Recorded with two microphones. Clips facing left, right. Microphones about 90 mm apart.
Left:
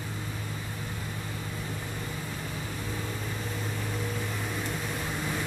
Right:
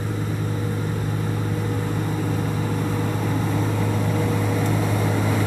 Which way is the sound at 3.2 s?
90° right.